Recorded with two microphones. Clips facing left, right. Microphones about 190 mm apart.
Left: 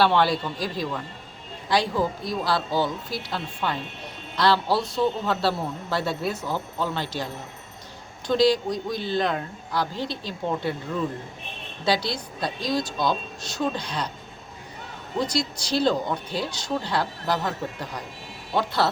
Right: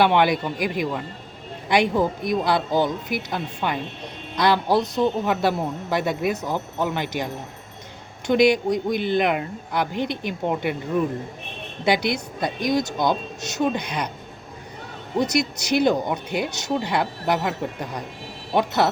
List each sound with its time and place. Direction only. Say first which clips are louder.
0.0 s a man's voice: right 2 dB; 15° right (ahead or behind)
8.3 s speech: right 3 dB; 20° right (ahead or behind)
15.2 s speech: right 4 dB; 20° right (ahead or behind)